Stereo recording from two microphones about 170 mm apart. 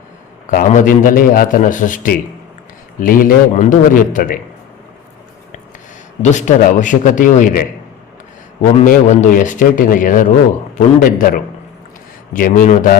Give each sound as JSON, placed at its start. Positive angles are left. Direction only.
{"t": 0.4, "sound": "a man's voice", "side_deg": 45}
{"t": 6.2, "sound": "a man's voice", "side_deg": 45}
{"t": 8.8, "sound": "a man's voice", "side_deg": 45}